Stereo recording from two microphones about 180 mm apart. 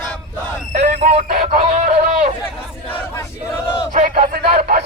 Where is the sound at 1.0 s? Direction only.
35° right (ahead or behind).